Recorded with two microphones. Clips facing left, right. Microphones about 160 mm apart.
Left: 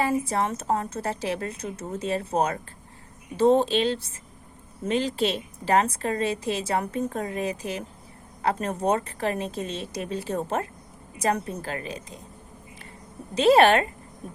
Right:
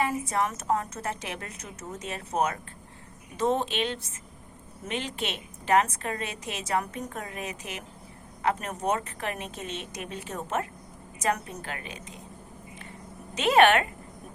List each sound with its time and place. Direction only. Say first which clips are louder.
0.0 s a woman's voice: left 3 dB; 30° left (ahead or behind)
13.3 s a woman's voice: left 3 dB; 35° left (ahead or behind)